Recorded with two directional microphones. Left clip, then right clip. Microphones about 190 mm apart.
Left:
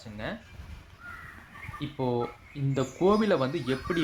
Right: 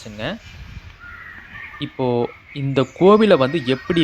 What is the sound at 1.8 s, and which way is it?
Speech, 40° right (ahead or behind).